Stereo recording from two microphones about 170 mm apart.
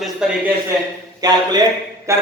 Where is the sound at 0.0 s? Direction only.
5° right (ahead or behind).